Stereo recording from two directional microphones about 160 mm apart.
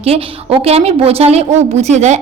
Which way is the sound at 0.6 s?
40° right (ahead or behind).